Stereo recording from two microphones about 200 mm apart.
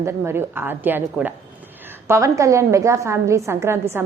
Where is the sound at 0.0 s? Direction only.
15° right (ahead or behind).